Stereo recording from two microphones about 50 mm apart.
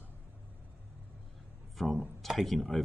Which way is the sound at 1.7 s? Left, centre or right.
Centre.